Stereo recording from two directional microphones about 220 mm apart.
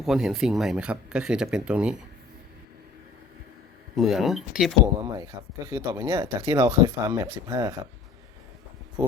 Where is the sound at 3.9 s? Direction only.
Centre (ahead or behind).